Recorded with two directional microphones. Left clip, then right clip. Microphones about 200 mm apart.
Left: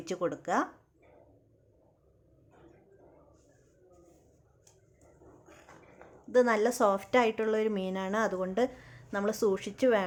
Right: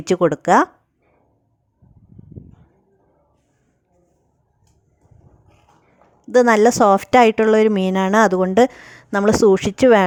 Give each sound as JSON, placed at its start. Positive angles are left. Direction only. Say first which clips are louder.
{"t": 0.0, "sound": "a woman's voice", "louder": "right 16 dB", "side_deg": -45}
{"t": 6.3, "sound": "a woman's voice", "louder": "right 13 dB", "side_deg": -45}